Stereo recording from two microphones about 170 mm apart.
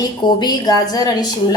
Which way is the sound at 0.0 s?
25° left (ahead or behind).